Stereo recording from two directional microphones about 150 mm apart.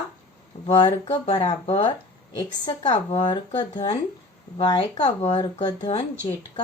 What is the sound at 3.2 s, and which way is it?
Speech, 30° left (ahead or behind).